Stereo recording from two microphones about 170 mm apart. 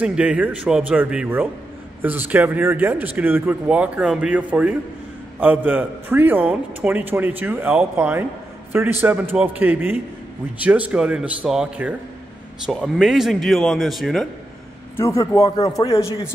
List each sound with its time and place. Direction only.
0.0 s a man's voice: 5° right (ahead or behind)
15.0 s a man's voice: 20° left (ahead or behind)